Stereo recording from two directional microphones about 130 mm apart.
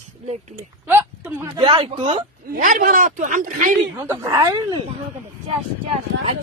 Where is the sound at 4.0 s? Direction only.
25° right (ahead or behind).